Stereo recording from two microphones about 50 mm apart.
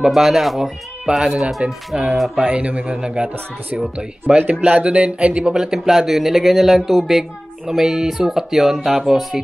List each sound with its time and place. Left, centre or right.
0.0 s speech: centre
2.3 s speech: right
4.4 s speech: right
5.6 s speech: centre